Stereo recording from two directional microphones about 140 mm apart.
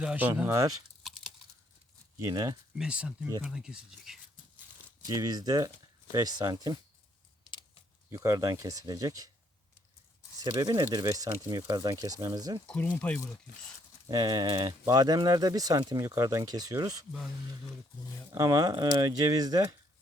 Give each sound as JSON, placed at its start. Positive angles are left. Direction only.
{"t": 0.0, "sound": "speech", "side_deg": -10}
{"t": 2.1, "sound": "speech", "side_deg": -25}
{"t": 2.7, "sound": "speech", "side_deg": -5}
{"t": 5.0, "sound": "speech", "side_deg": -25}
{"t": 8.1, "sound": "speech", "side_deg": -20}
{"t": 10.4, "sound": "speech", "side_deg": -25}
{"t": 12.6, "sound": "speech", "side_deg": 10}
{"t": 14.1, "sound": "speech", "side_deg": -25}
{"t": 18.3, "sound": "speech", "side_deg": -25}